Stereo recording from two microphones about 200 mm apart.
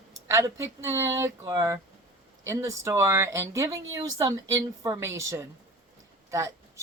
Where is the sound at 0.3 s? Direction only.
15° right (ahead or behind).